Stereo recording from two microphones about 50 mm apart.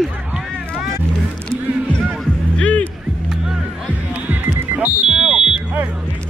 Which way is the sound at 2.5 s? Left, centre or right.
Left.